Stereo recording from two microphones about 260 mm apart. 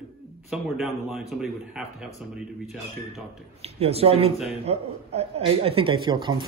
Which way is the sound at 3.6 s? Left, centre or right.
Right.